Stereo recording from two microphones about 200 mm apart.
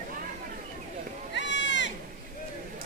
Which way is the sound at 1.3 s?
65° left (ahead or behind).